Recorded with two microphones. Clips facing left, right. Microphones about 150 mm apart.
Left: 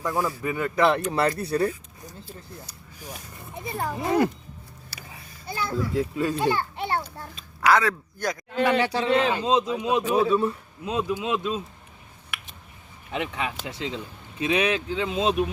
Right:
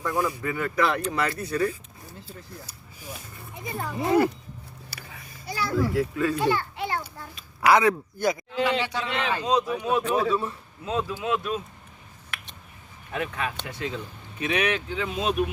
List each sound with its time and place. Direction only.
0.0 s speech: 15° left (ahead or behind); by 1.7 s 35° left (ahead or behind)
4.0 s speech: 5° right (ahead or behind)
4.9 s a sound: 10° right (ahead or behind)
5.5 s a child's voice: 25° left (ahead or behind)
7.6 s speech: 15° right (ahead or behind)
8.4 s speech: 55° left (ahead or behind)
8.9 s speech: 35° left (ahead or behind)
9.3 s speech: 20° left (ahead or behind)
13.1 s speech: 20° left (ahead or behind)